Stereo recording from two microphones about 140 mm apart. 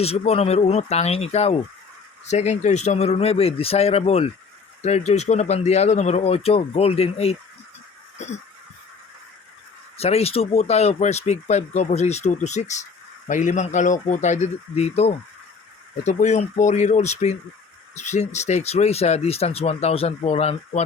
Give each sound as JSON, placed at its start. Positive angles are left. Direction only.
{"t": 0.0, "sound": "speech", "side_deg": 45}
{"t": 10.0, "sound": "a man's voice", "side_deg": 45}